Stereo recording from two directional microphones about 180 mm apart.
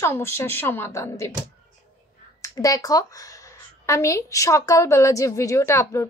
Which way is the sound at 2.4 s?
20° left (ahead or behind).